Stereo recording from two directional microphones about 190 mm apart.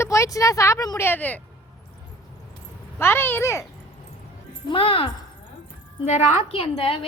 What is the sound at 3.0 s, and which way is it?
Speech, 10° left (ahead or behind).